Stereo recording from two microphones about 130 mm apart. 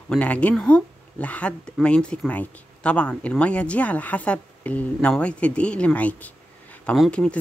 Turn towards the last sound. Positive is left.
turn(degrees=5)  # may be behind; listen again after turning